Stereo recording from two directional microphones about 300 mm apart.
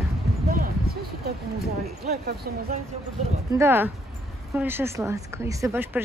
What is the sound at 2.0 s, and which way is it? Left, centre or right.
Speech, right.